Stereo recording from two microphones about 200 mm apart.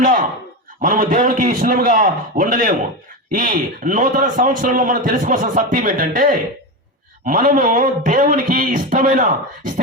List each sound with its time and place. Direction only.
0.0 s a man's voice: 40° right (ahead or behind)